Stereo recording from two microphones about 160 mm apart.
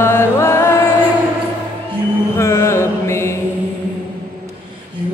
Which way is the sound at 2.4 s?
15° left (ahead or behind).